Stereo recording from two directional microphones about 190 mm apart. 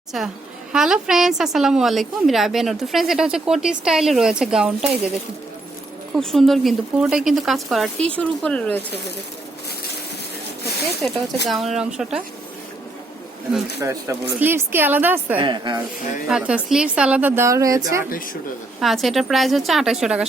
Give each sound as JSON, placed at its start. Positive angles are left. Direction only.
{"t": 0.1, "sound": "a woman's voice", "side_deg": -5}
{"t": 6.1, "sound": "a woman's voice", "side_deg": 0}
{"t": 11.0, "sound": "a woman's voice", "side_deg": 5}
{"t": 13.8, "sound": "a woman's voice", "side_deg": -15}
{"t": 15.4, "sound": "speech", "side_deg": -25}
{"t": 16.3, "sound": "a woman's voice", "side_deg": -5}
{"t": 18.8, "sound": "a woman's voice", "side_deg": 0}